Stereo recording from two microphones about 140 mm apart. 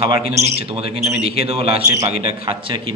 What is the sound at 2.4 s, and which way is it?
Speech, 35° right (ahead or behind).